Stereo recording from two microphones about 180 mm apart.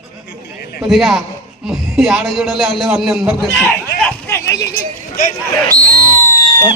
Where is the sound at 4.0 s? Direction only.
15° left (ahead or behind).